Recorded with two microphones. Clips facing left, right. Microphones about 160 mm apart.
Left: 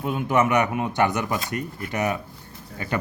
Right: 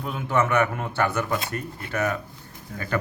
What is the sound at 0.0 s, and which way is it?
Speech, 15° left (ahead or behind).